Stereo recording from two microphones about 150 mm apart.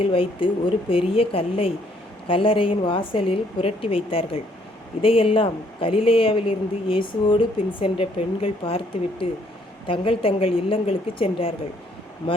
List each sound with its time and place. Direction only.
0.0 s a woman's voice: 35° left (ahead or behind)